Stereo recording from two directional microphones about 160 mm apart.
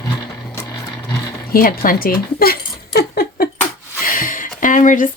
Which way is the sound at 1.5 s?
60° left (ahead or behind).